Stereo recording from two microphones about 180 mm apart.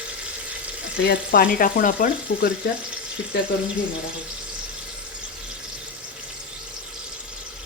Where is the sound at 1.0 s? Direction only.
60° left (ahead or behind).